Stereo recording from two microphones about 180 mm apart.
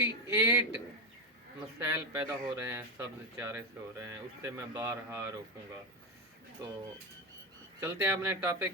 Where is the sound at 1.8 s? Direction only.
15° right (ahead or behind).